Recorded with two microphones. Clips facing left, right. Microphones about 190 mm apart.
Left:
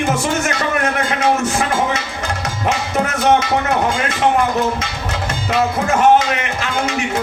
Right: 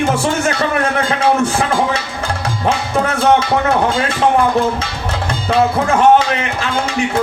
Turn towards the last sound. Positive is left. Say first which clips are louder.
# right 2 dB
turn(degrees=-30)  # may be behind; listen again after turning